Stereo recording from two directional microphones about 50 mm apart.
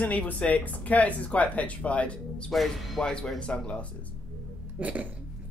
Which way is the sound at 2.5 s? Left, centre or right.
Centre.